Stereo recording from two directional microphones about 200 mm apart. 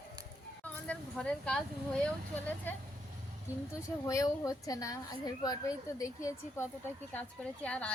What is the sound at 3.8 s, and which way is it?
A woman's voice, 15° left (ahead or behind).